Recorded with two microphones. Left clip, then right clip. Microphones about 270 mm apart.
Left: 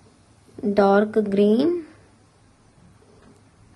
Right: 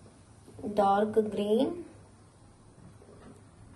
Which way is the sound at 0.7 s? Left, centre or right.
Left.